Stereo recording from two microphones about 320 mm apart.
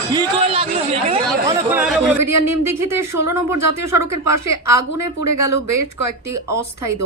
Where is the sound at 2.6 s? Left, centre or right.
Centre.